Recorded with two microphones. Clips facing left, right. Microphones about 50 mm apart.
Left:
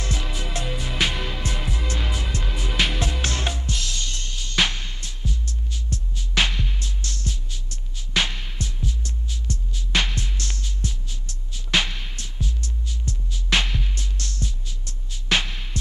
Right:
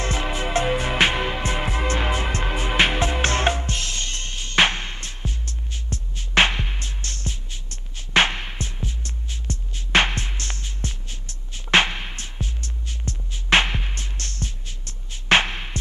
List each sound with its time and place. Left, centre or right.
0.0 s music: right